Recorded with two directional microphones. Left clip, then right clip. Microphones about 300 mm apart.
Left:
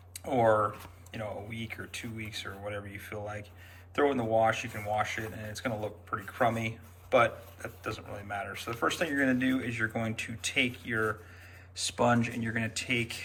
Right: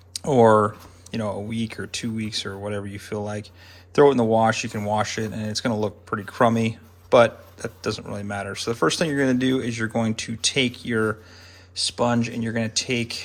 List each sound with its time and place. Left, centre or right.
1.1 s speech: centre